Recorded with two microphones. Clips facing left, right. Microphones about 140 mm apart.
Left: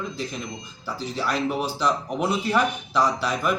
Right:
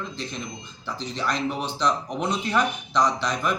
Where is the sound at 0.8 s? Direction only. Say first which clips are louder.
Left 1 dB; 10° left (ahead or behind).